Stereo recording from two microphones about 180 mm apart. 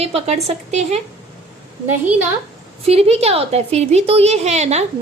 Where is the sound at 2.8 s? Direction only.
35° right (ahead or behind).